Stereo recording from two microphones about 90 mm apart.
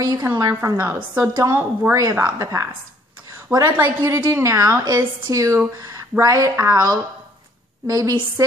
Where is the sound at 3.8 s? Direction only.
35° right (ahead or behind).